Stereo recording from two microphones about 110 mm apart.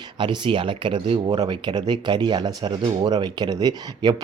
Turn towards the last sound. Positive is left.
turn(degrees=-40)  # may be behind; listen again after turning